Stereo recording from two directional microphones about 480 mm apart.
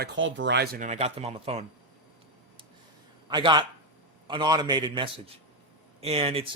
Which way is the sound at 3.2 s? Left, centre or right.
Centre.